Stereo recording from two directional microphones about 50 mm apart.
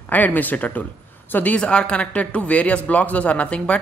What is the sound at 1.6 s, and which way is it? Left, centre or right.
Speech, left.